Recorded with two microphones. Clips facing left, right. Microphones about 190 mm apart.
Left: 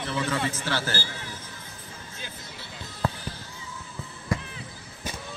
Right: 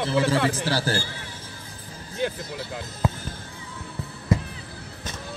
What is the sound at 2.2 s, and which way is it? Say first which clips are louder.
Music: right 18 dB; 70° right (ahead or behind).